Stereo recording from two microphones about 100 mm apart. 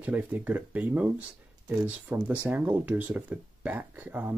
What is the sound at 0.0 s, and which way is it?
Speech, 15° right (ahead or behind).